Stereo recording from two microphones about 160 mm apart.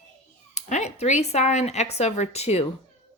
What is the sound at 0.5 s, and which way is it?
Speech, 45° left (ahead or behind).